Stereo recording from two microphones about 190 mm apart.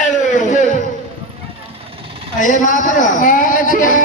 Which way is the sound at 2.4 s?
40° left (ahead or behind).